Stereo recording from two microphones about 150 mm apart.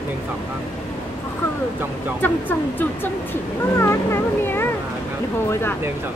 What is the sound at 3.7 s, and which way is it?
Speech, 20° left (ahead or behind).